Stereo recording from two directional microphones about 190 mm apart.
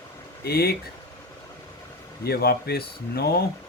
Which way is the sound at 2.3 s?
55° left (ahead or behind).